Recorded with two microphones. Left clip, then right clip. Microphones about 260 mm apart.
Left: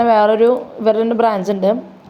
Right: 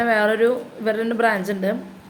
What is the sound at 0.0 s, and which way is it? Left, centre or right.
Speech, centre.